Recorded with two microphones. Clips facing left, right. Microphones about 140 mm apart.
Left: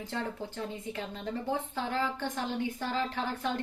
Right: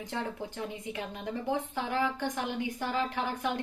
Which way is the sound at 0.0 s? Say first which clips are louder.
Even; 15° right (ahead or behind).